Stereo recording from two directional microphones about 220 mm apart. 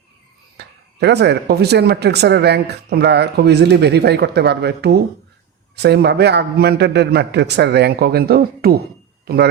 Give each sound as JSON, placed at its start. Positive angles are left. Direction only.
{"t": 0.5, "sound": "speech", "side_deg": -50}